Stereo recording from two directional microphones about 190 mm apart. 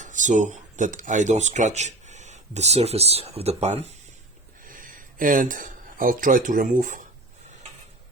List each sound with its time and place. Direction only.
0.0 s speech: 40° right (ahead or behind)
4.6 s speech: 45° right (ahead or behind)